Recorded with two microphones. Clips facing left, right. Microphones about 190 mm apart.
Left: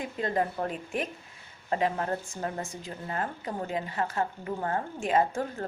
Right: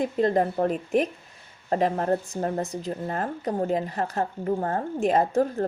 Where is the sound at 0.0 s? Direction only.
35° right (ahead or behind).